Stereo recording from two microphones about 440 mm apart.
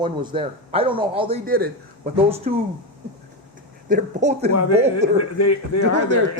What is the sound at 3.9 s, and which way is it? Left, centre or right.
Speech, centre.